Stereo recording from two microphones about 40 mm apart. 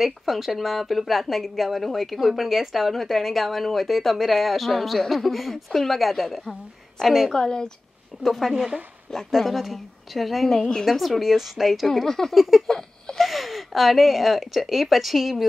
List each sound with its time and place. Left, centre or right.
0.0 s speech: centre
7.2 s a woman's voice: centre
8.2 s speech: centre
12.4 s a sound: centre
12.6 s a sound: centre
13.2 s speech: centre